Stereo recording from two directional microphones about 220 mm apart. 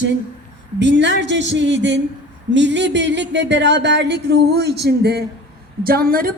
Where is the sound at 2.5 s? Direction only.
55° right (ahead or behind).